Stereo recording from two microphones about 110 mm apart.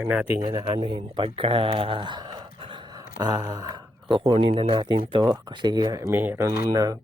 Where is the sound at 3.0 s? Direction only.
30° right (ahead or behind).